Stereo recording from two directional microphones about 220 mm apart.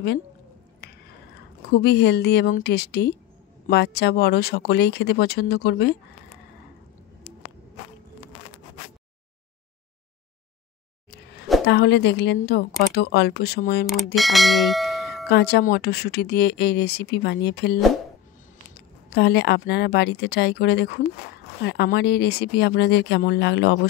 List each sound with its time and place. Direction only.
1.7 s speech: 50° left (ahead or behind)
11.6 s a woman's voice: 50° left (ahead or behind)
14.1 s bell: centre (ahead or behind)
15.2 s speech: 50° left (ahead or behind)
19.1 s speech: 50° left (ahead or behind)